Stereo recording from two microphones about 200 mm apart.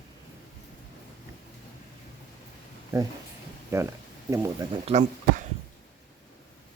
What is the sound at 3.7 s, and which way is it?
Speech, 15° right (ahead or behind).